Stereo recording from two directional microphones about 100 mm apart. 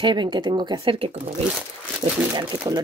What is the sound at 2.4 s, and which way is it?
Speech, 45° right (ahead or behind).